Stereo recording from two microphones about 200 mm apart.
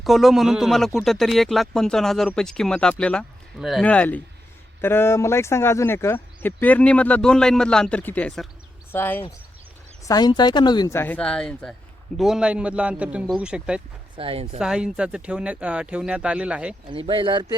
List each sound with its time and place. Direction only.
0.0 s speech: centre (ahead or behind)
14.2 s speech: 30° right (ahead or behind)
14.6 s speech: 5° right (ahead or behind)
16.8 s speech: 25° right (ahead or behind)